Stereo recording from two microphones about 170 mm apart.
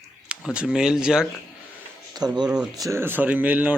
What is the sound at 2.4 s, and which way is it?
Speech, 5° right (ahead or behind).